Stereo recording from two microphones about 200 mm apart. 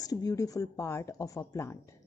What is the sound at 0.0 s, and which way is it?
A woman's voice, 20° left (ahead or behind).